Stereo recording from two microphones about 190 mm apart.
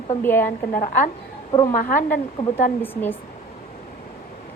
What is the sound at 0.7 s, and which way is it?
Speech, 45° left (ahead or behind).